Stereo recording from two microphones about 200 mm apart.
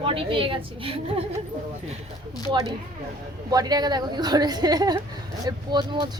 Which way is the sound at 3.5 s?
20° right (ahead or behind).